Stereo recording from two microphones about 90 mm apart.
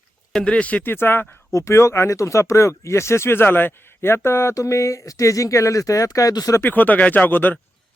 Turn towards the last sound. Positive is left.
turn(degrees=20)  # may be behind; listen again after turning